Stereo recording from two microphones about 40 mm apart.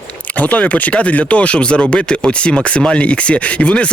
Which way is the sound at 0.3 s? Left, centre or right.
Left.